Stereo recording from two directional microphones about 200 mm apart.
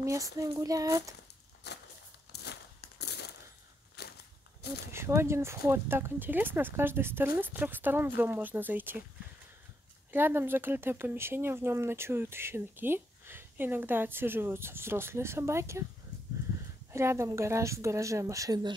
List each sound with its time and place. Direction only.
0.0 s speech: 15° right (ahead or behind)
1.6 s a sound: 55° left (ahead or behind)
4.0 s crushing: 55° left (ahead or behind)
4.6 s a sound: 55° left (ahead or behind)
4.9 s speech: 15° right (ahead or behind)
10.1 s speech: 10° right (ahead or behind)
16.9 s speech: 15° right (ahead or behind)